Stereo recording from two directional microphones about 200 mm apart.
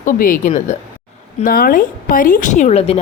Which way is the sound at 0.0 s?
40° left (ahead or behind).